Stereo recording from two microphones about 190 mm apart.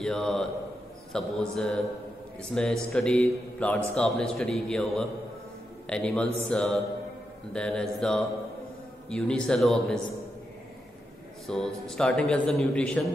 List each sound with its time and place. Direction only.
0.0 s a man's voice: 5° left (ahead or behind)
11.4 s a man's voice: centre (ahead or behind)